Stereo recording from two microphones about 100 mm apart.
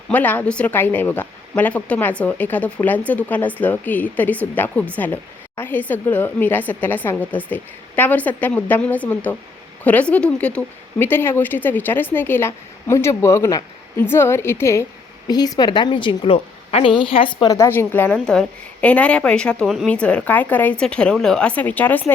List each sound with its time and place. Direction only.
0.1 s speech: 15° left (ahead or behind)
11.0 s a woman's voice: 25° left (ahead or behind)
15.3 s a woman's voice: 45° left (ahead or behind); by 17.3 s 65° left (ahead or behind)
17.4 s a woman's voice: 35° left (ahead or behind)
17.7 s a woman's voice: 20° left (ahead or behind)
18.1 s speech: 10° left (ahead or behind)
19.6 s speech: 5° right (ahead or behind)
19.9 s speech: 10° left (ahead or behind)